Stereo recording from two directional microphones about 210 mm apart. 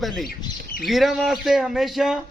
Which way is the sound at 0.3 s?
45° left (ahead or behind).